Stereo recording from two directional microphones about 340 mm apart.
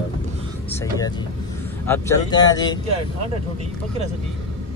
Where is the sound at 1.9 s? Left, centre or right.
Centre.